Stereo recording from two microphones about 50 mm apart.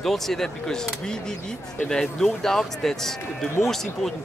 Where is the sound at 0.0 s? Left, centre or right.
Centre.